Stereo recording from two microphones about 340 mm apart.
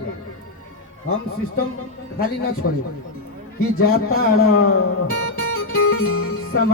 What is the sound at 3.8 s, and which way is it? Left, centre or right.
Speech, left.